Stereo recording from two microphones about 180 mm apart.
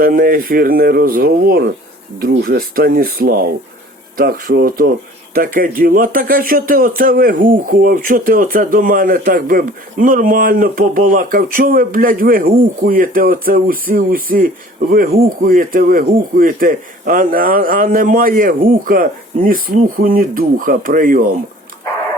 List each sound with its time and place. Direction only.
0.0 s speech: 55° right (ahead or behind)